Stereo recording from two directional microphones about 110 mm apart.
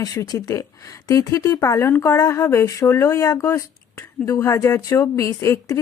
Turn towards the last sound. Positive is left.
turn(degrees=25)  # may be behind; listen again after turning